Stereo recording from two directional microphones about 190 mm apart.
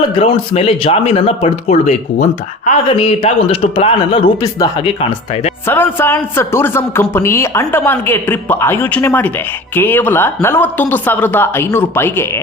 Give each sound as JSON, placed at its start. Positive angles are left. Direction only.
{"t": 0.2, "sound": "speech", "side_deg": 30}
{"t": 4.9, "sound": "speech", "side_deg": 30}
{"t": 5.6, "sound": "a man's voice", "side_deg": 10}